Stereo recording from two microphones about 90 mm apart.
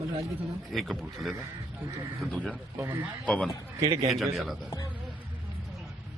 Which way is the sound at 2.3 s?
15° left (ahead or behind).